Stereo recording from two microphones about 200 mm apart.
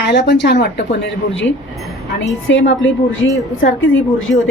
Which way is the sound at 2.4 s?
70° left (ahead or behind).